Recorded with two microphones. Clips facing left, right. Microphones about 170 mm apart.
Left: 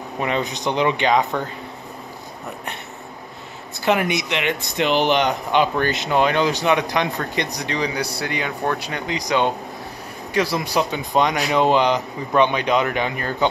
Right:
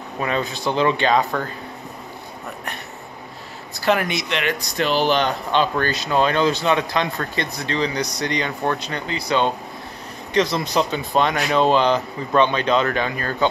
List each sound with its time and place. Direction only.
0.2 s speech: 20° left (ahead or behind)
3.8 s speech: 20° left (ahead or behind)